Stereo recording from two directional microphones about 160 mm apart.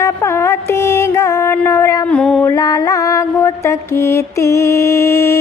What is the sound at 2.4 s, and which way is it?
Mantra, 20° left (ahead or behind).